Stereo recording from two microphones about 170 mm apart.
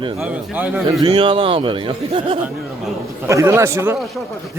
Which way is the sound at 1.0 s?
30° right (ahead or behind).